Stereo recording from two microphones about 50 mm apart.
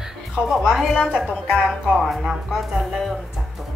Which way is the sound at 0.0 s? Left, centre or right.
Centre.